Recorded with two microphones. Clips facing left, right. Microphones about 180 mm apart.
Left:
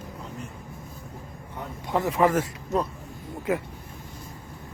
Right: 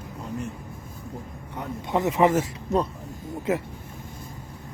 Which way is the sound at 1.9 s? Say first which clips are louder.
Right 2 dB; 20° right (ahead or behind).